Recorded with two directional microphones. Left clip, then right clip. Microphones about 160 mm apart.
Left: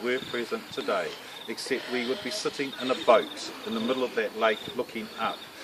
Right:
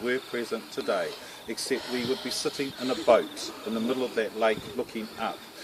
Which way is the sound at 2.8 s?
20° right (ahead or behind).